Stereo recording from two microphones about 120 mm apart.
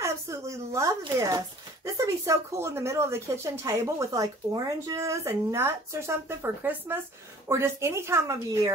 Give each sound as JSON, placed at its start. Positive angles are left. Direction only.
{"t": 0.0, "sound": "speech", "side_deg": -25}